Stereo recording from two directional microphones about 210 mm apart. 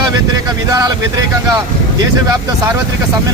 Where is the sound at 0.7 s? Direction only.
15° right (ahead or behind).